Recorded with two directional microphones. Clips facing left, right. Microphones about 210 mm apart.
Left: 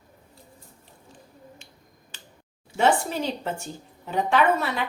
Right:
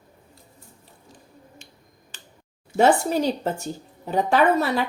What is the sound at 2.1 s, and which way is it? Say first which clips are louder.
Scissors: even; 50° right (ahead or behind).